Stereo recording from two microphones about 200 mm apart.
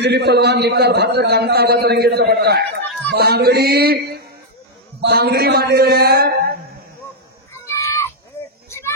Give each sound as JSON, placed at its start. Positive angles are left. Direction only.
{"t": 0.0, "sound": "a man's voice", "side_deg": -55}
{"t": 7.6, "sound": "chicken", "side_deg": 15}
{"t": 8.6, "sound": "a sound", "side_deg": 10}